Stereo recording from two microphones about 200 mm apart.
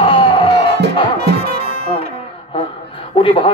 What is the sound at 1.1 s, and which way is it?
Music, 55° right (ahead or behind).